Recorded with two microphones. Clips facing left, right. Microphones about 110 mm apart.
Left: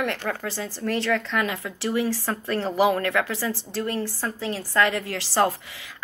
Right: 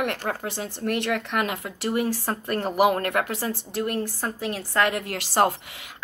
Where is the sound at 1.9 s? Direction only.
50° right (ahead or behind).